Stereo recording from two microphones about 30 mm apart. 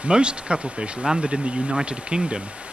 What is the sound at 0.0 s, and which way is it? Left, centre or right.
Speech, right.